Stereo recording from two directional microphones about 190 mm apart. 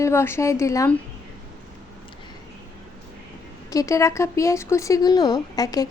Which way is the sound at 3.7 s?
15° left (ahead or behind).